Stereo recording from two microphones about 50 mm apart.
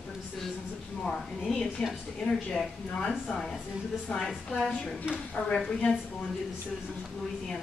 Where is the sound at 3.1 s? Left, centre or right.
Centre.